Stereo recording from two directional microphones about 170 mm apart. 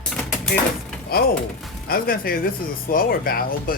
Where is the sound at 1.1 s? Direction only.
65° left (ahead or behind).